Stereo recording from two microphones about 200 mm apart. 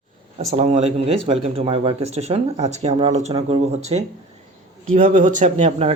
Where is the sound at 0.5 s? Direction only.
30° right (ahead or behind).